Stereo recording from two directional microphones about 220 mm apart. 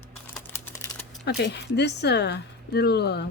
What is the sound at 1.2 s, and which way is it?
Speech, 50° left (ahead or behind).